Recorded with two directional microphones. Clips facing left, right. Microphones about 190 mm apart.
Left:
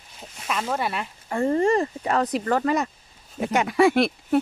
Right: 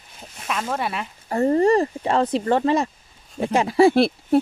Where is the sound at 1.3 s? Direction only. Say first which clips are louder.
Right 3 dB; 35° right (ahead or behind).